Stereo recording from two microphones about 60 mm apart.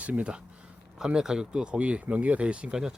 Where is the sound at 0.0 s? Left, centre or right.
Right.